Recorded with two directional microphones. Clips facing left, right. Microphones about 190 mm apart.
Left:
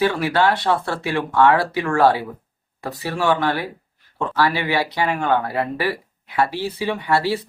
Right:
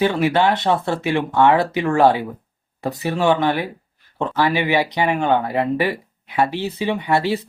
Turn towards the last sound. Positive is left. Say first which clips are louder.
# right 1 dB
turn(degrees=-20)  # may be behind; listen again after turning